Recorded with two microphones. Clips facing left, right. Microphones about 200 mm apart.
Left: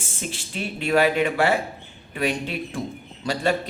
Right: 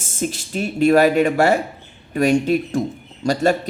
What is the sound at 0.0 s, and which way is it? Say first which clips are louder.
A man's voice: right 9 dB; 45° right (ahead or behind).